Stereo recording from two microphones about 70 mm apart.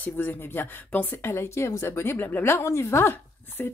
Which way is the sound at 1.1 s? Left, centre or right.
Left.